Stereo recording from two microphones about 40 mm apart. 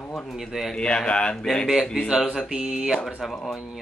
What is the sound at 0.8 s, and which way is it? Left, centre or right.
Speech, left.